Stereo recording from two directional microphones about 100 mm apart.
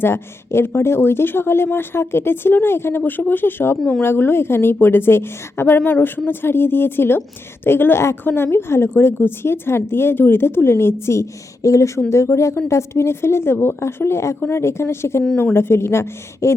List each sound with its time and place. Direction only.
0.0 s a woman's voice: 25° left (ahead or behind)